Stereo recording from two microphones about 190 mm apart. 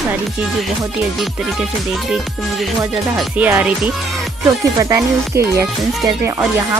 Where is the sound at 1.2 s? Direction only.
Centre (ahead or behind).